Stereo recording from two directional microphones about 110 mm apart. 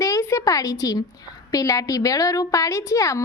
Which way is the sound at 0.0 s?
30° left (ahead or behind).